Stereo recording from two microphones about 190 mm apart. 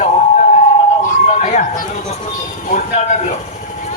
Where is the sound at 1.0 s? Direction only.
40° left (ahead or behind).